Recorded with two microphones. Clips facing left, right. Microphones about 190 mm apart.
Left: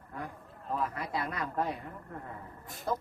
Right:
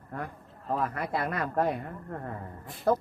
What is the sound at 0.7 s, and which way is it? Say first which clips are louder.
A man's voice: right 4 dB; 55° right (ahead or behind).